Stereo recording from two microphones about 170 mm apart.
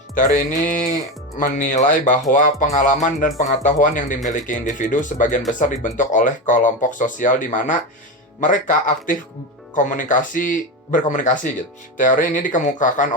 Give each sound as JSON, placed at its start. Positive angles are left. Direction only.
{"t": 0.1, "sound": "speech", "side_deg": 50}